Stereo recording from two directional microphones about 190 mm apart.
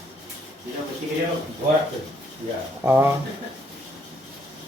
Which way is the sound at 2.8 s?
10° right (ahead or behind).